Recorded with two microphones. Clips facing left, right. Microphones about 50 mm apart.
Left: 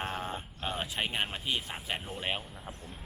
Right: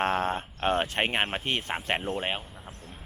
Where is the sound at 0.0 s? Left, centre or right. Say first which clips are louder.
Right 9 dB; right.